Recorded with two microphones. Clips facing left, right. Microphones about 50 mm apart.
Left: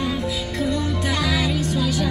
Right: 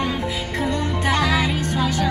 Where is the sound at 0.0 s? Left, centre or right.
Right.